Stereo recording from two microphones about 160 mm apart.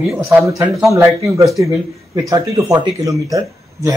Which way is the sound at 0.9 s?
20° right (ahead or behind).